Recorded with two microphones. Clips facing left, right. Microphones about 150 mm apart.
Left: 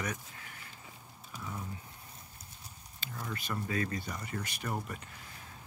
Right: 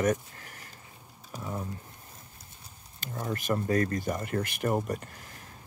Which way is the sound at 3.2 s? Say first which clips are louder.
Right 9 dB; 45° right (ahead or behind).